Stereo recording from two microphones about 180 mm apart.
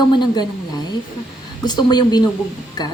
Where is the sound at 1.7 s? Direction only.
25° left (ahead or behind).